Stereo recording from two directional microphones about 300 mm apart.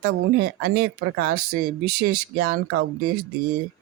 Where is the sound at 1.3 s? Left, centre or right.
Right.